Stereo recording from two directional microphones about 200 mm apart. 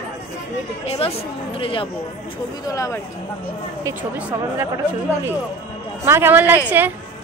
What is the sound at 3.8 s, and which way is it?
Speech, 15° right (ahead or behind).